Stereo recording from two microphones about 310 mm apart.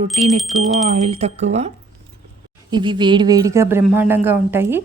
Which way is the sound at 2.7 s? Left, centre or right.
Centre.